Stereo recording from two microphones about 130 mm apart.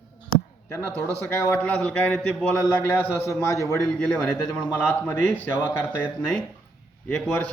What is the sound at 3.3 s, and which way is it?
Speech, 25° left (ahead or behind).